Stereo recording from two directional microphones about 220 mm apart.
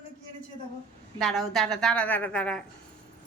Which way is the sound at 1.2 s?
Centre (ahead or behind).